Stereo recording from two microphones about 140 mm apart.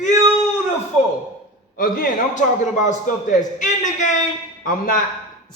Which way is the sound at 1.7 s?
90° left.